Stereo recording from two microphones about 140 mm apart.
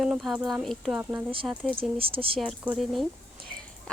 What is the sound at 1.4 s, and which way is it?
Speech, 5° left (ahead or behind).